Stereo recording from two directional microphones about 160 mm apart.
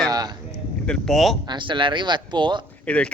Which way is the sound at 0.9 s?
Centre (ahead or behind).